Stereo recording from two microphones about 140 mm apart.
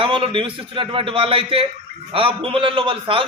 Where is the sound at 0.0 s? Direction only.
35° right (ahead or behind).